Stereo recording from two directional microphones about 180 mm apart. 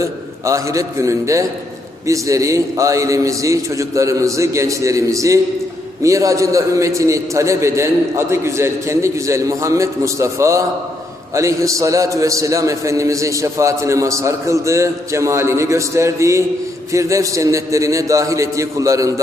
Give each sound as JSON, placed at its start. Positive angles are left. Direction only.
{"t": 0.0, "sound": "a man's voice", "side_deg": -15}